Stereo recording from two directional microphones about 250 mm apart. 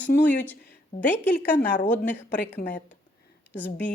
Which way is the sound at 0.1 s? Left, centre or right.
Left.